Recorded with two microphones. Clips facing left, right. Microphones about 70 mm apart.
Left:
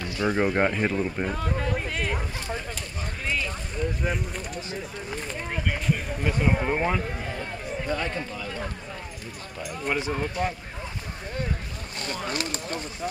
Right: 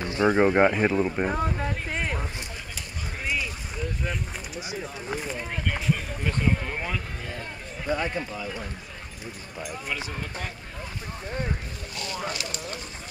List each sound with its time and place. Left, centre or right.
0.0 s a sound: right
0.4 s speech: centre
3.3 s a sound: centre
3.8 s boat: centre
4.6 s speech: centre
6.2 s speech: centre
7.3 s speech: centre
9.8 s speech: left
12.3 s speech: left